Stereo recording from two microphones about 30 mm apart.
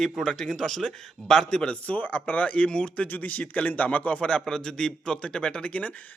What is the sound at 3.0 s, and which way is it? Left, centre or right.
Speech, left.